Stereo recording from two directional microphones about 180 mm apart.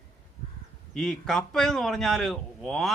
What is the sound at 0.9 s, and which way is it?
A man's voice, 5° left (ahead or behind).